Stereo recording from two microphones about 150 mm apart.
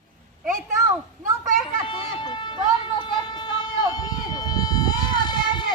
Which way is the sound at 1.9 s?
30° left (ahead or behind).